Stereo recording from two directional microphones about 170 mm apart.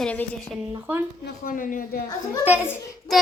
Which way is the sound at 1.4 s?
55° left (ahead or behind).